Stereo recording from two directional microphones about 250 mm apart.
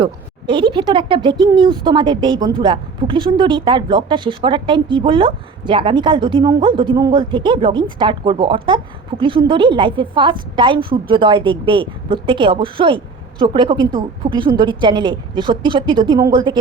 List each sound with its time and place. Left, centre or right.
0.0 s speech: centre
14.2 s a woman's voice: right
14.6 s speech: centre